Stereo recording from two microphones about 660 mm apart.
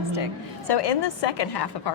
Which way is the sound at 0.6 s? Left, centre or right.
Left.